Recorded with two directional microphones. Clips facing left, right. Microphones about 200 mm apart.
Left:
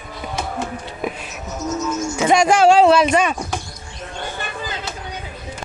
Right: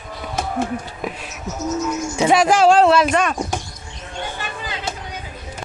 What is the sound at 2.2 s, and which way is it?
Speech, centre (ahead or behind).